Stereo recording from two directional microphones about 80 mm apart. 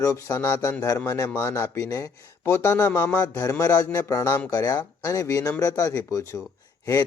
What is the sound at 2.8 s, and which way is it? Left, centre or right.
Speech, left.